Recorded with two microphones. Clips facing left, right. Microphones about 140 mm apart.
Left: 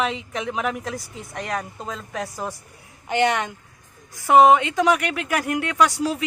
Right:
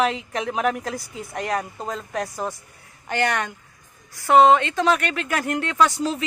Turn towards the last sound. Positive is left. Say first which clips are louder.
# even
turn(degrees=10)  # may be behind; listen again after turning